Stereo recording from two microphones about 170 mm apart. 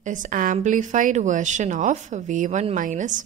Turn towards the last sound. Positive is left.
turn(degrees=-45)  # may be behind; listen again after turning